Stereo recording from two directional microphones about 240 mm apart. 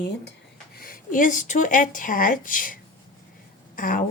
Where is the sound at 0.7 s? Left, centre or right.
Left.